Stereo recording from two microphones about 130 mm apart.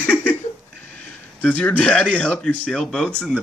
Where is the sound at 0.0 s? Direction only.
10° left (ahead or behind).